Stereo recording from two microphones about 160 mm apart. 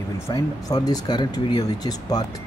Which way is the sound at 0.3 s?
25° left (ahead or behind).